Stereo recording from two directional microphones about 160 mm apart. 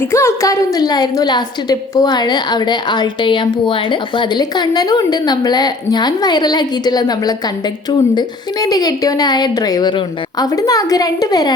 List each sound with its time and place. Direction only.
0.1 s a woman's voice: 15° left (ahead or behind)
8.6 s a woman's voice: 25° left (ahead or behind)